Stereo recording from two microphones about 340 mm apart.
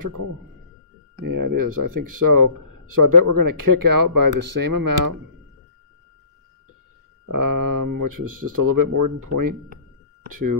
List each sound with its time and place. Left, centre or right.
0.0 s speech: right
7.2 s speech: right